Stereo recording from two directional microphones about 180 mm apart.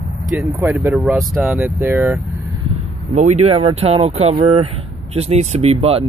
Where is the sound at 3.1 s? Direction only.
40° right (ahead or behind).